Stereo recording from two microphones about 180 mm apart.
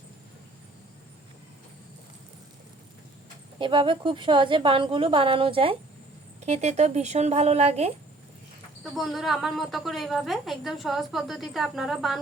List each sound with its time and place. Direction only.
3.6 s a woman's voice: 30° right (ahead or behind)
8.8 s a woman's voice: centre (ahead or behind)